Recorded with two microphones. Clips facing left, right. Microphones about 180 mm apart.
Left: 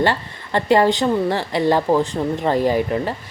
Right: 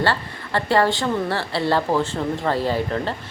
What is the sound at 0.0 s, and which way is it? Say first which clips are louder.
A woman's voice: left 3 dB; 20° left (ahead or behind).